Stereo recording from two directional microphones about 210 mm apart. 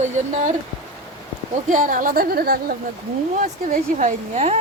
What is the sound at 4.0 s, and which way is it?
Speech, 30° right (ahead or behind).